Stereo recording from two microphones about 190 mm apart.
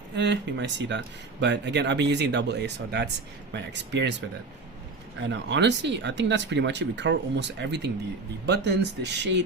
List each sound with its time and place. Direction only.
0.2 s speech: 65° right (ahead or behind)
5.2 s speech: 70° right (ahead or behind)